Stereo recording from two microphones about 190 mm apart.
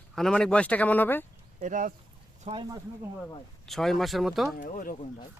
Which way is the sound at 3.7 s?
Centre (ahead or behind).